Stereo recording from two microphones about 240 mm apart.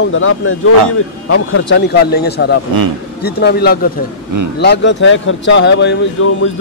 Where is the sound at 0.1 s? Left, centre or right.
Left.